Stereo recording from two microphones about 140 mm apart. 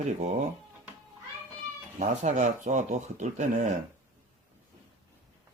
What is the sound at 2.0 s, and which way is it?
Speech, 60° right (ahead or behind).